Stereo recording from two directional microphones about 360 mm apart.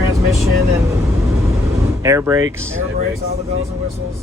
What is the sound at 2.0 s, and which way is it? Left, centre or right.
Speech, centre.